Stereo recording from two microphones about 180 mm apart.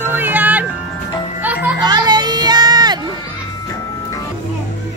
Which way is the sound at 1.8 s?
25° right (ahead or behind).